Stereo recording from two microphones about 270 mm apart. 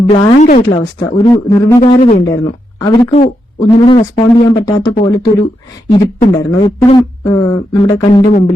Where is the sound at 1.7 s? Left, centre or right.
Left.